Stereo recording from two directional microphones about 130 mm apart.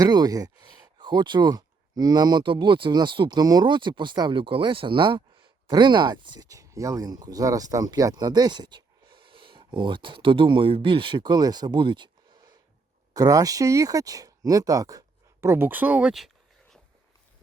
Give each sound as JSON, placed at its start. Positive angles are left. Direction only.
{"t": 0.0, "sound": "speech", "side_deg": -30}